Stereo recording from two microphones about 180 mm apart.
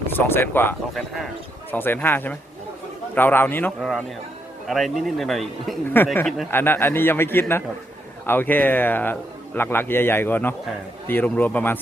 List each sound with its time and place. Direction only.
0.1 s a man's voice: 10° left (ahead or behind)
3.8 s speech: centre (ahead or behind)
6.5 s a man's voice: 10° left (ahead or behind)